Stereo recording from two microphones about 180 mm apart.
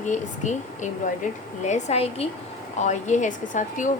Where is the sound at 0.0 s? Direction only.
45° left (ahead or behind).